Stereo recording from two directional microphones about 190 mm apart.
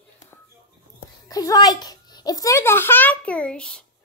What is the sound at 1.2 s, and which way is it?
A child's voice, 20° left (ahead or behind).